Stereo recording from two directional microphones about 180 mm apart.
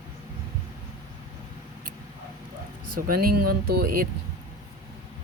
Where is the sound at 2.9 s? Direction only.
55° right (ahead or behind).